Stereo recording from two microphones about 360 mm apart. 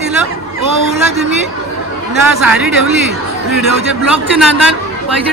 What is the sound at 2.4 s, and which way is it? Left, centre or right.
Speech, centre.